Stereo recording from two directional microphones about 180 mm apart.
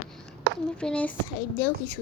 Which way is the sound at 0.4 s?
75° right (ahead or behind).